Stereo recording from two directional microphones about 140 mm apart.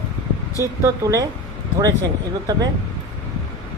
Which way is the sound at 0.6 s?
20° right (ahead or behind).